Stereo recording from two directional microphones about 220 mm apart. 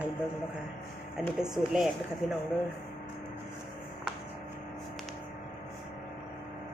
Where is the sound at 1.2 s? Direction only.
5° right (ahead or behind).